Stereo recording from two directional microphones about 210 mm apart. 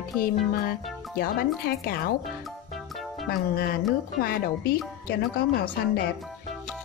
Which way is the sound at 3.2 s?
45° left (ahead or behind).